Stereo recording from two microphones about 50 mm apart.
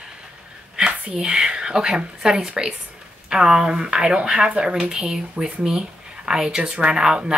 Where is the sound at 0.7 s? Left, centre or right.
Centre.